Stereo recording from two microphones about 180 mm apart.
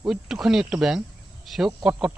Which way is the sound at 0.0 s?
Centre (ahead or behind).